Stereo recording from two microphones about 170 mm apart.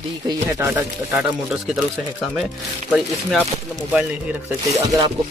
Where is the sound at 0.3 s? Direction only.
20° right (ahead or behind).